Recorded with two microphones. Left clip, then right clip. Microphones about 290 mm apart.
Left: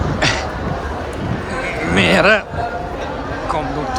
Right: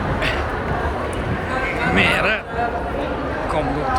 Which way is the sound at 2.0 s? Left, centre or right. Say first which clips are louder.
Left 6 dB; centre.